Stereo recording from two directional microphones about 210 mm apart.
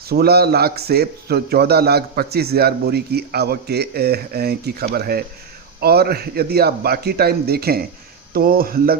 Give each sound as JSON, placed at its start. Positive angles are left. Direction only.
{"t": 0.1, "sound": "a man's voice", "side_deg": -50}